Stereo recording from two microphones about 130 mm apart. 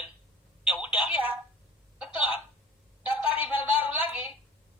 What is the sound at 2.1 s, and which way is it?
Speech, 40° left (ahead or behind).